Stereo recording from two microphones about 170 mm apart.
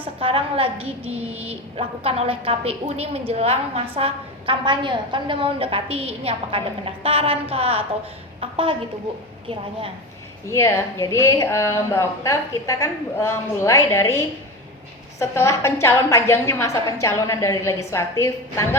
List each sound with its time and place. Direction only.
0.0 s a woman's voice: 35° right (ahead or behind)
10.4 s a woman's voice: 15° left (ahead or behind)